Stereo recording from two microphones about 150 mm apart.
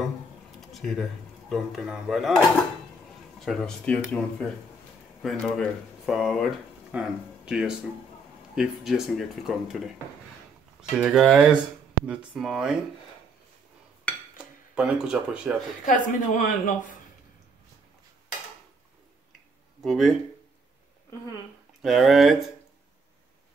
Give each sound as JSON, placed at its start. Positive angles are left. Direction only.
{"t": 0.6, "sound": "a sound", "side_deg": 0}
{"t": 1.5, "sound": "speech", "side_deg": 0}
{"t": 14.4, "sound": "speech", "side_deg": -5}
{"t": 15.8, "sound": "speech", "side_deg": 60}
{"t": 19.8, "sound": "speech", "side_deg": 0}
{"t": 21.8, "sound": "speech", "side_deg": 0}